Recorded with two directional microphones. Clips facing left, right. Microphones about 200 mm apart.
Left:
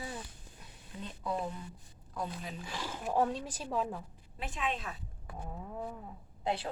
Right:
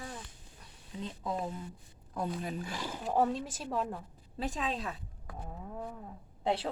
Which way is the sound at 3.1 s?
Centre (ahead or behind).